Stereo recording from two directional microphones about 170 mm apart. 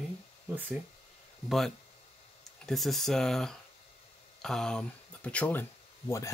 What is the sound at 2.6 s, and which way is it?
Speech, centre (ahead or behind).